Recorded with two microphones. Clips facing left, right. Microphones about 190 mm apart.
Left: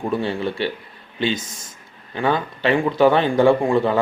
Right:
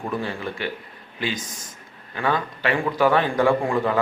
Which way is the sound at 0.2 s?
30° left (ahead or behind).